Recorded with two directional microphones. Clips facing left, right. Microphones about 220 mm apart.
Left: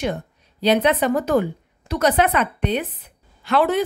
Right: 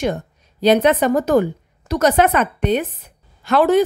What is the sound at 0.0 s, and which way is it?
A woman's voice, 45° right (ahead or behind).